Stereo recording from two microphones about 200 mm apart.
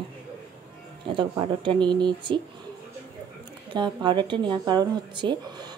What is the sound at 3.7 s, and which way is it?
Speech, 20° right (ahead or behind).